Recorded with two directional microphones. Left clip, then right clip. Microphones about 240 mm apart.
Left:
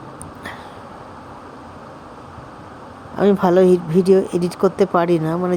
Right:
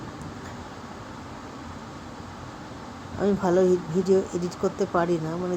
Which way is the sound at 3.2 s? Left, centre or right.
Left.